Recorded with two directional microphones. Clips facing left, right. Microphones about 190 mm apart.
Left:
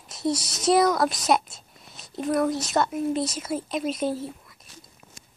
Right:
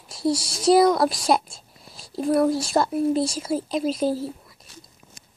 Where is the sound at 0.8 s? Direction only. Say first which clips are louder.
Right 3 dB; 25° right (ahead or behind).